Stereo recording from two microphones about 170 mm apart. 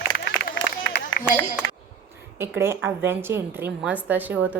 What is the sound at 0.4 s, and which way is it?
Run, 65° left (ahead or behind).